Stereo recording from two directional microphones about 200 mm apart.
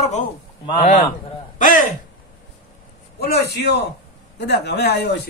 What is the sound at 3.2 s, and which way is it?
Speech, 55° left (ahead or behind).